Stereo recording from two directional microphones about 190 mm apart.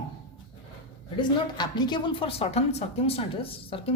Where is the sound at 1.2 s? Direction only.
25° left (ahead or behind).